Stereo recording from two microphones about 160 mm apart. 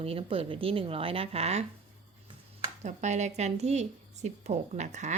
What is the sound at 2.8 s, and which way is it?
Speech, 45° right (ahead or behind).